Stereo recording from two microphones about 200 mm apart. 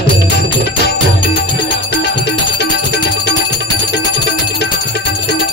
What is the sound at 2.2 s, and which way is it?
Music, 55° left (ahead or behind).